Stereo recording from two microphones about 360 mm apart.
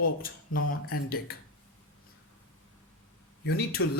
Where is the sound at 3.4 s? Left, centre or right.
Left.